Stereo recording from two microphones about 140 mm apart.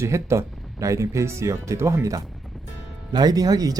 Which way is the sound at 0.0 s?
20° right (ahead or behind).